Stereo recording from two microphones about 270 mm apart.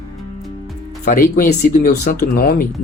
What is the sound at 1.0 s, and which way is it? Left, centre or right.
Speech, left.